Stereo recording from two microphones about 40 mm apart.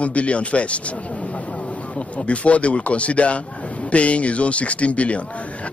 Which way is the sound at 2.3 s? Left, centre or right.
Left.